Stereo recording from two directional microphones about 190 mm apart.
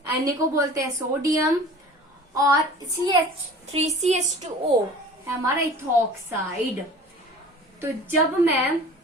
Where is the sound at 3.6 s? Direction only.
35° right (ahead or behind).